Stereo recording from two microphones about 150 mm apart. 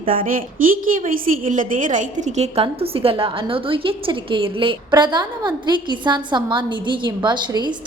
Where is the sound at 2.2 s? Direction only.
50° right (ahead or behind).